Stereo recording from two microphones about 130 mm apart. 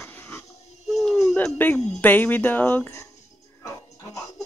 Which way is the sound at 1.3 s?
15° left (ahead or behind).